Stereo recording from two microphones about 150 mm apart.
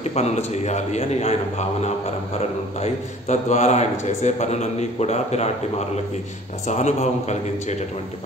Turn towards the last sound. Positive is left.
turn(degrees=50)  # may be behind; listen again after turning